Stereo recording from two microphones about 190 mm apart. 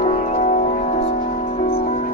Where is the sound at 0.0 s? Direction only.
35° left (ahead or behind).